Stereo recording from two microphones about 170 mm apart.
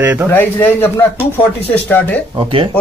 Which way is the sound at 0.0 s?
10° right (ahead or behind).